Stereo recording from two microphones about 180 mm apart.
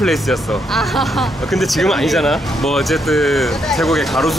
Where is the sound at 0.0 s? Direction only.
Centre (ahead or behind).